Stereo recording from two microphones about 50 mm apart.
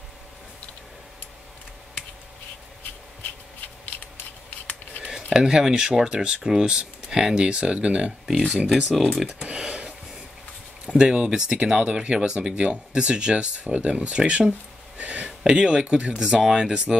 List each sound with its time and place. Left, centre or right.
5.0 s speech: centre
8.9 s speech: centre
9.2 s speech: centre
9.5 s a sound: right
10.9 s speech: centre